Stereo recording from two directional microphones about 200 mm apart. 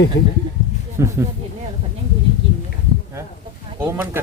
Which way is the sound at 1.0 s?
15° right (ahead or behind).